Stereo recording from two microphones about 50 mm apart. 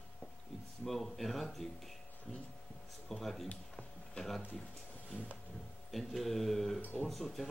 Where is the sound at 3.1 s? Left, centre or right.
Centre.